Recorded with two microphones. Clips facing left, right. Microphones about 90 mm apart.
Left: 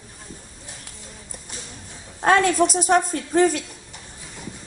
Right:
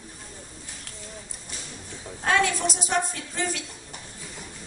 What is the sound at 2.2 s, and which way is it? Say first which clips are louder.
A woman's voice: left 7 dB; 45° left (ahead or behind).